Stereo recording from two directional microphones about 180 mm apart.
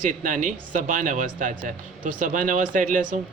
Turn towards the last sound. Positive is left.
turn(degrees=-45)  # may be behind; listen again after turning